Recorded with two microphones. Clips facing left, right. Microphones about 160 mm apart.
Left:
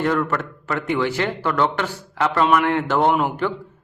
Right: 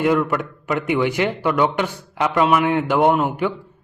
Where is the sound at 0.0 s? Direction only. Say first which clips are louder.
Right 3 dB; 10° right (ahead or behind).